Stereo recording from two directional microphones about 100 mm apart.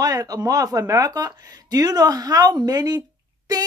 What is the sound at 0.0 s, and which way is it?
Speech, 35° right (ahead or behind).